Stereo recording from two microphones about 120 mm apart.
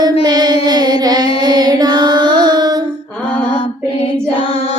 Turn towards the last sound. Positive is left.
turn(degrees=55)  # may be behind; listen again after turning